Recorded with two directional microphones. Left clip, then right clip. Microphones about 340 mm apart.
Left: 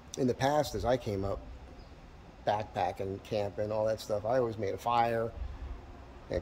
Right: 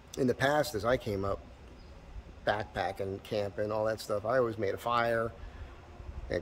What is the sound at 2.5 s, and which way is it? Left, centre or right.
Speech, centre.